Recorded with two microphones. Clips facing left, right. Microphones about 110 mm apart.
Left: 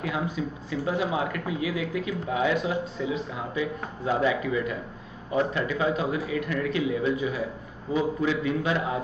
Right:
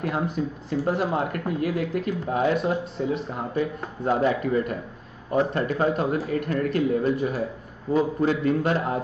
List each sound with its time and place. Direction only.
0.0 s speech: 50° right (ahead or behind)